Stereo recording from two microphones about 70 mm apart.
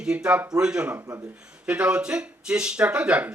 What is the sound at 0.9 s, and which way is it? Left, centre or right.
Speech, right.